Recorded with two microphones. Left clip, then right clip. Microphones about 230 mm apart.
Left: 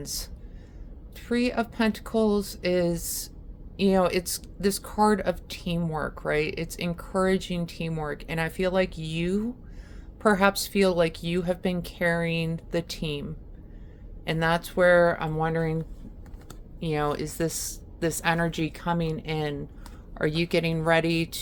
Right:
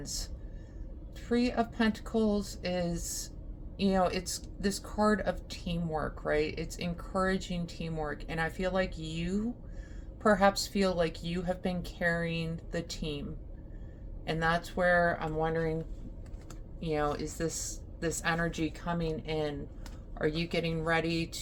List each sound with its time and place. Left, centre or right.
0.0 s speech: left
1.3 s speech: left
14.3 s speech: left
16.8 s speech: left